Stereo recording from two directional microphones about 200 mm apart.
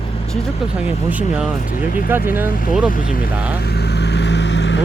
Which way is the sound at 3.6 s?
55° left (ahead or behind).